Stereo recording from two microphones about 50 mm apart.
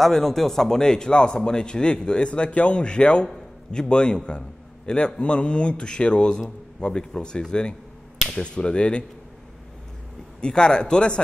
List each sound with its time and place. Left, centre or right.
0.0 s a man's voice: centre
10.4 s a man's voice: centre